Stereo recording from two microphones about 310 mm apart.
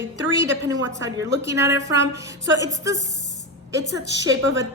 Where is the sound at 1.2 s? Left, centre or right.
Centre.